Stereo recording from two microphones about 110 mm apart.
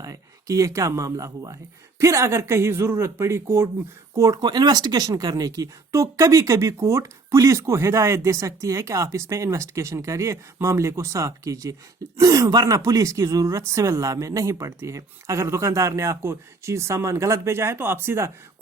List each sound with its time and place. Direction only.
0.0 s speech: 30° right (ahead or behind)